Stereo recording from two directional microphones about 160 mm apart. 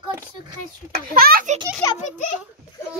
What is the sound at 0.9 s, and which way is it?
Speech, 70° right (ahead or behind).